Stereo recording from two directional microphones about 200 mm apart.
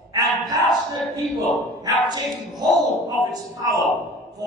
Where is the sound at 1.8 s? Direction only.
20° right (ahead or behind).